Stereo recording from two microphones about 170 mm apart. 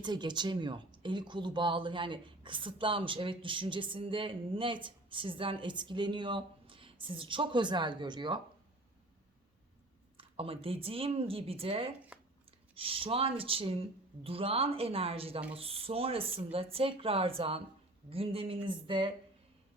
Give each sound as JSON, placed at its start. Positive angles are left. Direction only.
{"t": 0.0, "sound": "speech", "side_deg": -25}
{"t": 10.2, "sound": "speech", "side_deg": -35}